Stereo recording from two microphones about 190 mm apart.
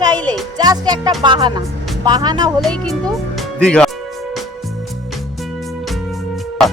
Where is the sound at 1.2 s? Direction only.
25° right (ahead or behind).